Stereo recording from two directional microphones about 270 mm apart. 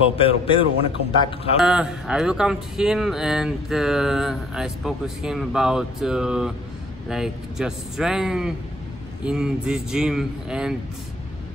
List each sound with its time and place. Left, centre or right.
0.0 s speech: left
1.6 s speech: centre